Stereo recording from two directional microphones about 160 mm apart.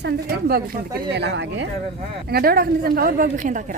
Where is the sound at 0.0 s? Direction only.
75° right (ahead or behind).